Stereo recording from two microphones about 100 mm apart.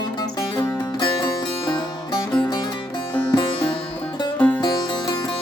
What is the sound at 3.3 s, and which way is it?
Music, 55° left (ahead or behind).